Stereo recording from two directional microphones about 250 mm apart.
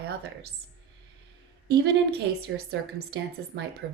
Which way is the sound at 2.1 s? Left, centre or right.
Right.